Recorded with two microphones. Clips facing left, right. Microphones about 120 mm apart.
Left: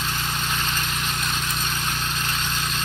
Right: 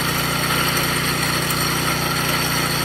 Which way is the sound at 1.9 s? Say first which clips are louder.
Right 6 dB; 90° right.